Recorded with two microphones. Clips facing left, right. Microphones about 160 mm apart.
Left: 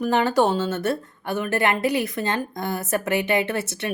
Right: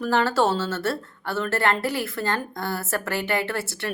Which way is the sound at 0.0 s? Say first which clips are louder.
Left 2 dB; 15° left (ahead or behind).